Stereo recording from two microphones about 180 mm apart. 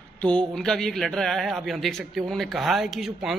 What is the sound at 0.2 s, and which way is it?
A man's voice, 5° left (ahead or behind).